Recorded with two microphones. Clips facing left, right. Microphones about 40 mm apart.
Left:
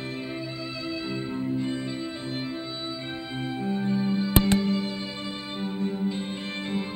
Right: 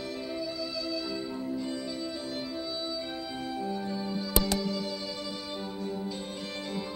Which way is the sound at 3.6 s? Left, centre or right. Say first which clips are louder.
Left 8 dB; left.